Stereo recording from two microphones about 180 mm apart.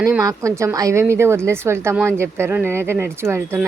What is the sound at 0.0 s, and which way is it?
Speech, 15° right (ahead or behind).